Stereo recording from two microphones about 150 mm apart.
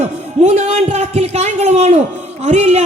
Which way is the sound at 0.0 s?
45° right (ahead or behind).